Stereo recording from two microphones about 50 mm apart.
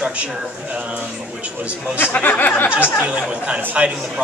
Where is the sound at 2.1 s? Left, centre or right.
Left.